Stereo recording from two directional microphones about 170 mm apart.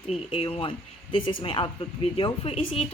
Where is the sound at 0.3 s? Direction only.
35° left (ahead or behind).